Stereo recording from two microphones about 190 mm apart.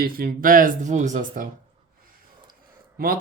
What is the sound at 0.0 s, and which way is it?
Speech, 50° right (ahead or behind).